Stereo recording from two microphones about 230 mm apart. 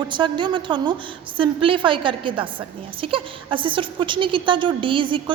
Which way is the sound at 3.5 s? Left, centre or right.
Right.